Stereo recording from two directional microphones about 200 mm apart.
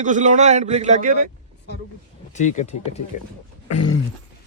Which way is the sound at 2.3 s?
35° left (ahead or behind).